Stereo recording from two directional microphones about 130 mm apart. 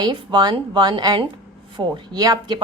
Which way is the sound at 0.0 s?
35° right (ahead or behind).